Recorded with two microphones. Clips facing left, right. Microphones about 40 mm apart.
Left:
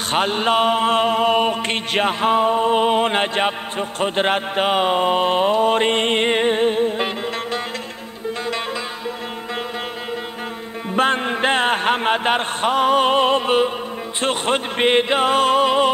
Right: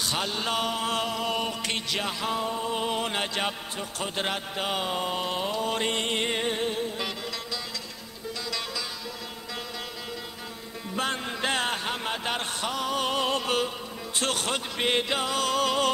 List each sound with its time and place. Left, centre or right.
0.1 s mantra: left
10.9 s music: left
14.2 s mantra: left